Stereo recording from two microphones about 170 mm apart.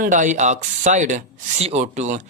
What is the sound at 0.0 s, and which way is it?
Speech, 50° right (ahead or behind).